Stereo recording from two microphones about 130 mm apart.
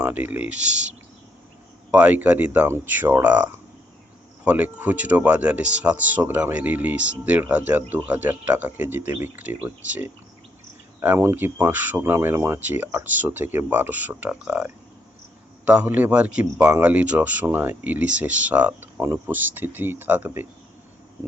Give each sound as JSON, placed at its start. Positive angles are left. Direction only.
{"t": 0.0, "sound": "speech", "side_deg": -15}
{"t": 1.9, "sound": "speech", "side_deg": -10}